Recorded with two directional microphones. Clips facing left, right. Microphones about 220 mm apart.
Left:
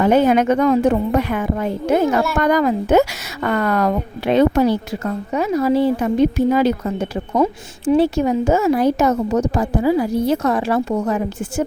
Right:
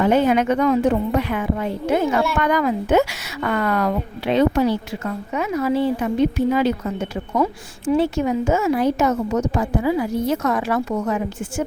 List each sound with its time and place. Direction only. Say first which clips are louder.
0.0 s a woman's voice: left 3 dB; 40° left (ahead or behind)
7.3 s a woman's voice: left 3 dB; 20° left (ahead or behind)
7.9 s a woman's voice: left 3 dB; 35° left (ahead or behind)